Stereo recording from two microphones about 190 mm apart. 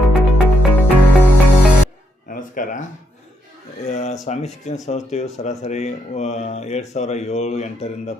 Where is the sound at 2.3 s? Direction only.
45° left (ahead or behind).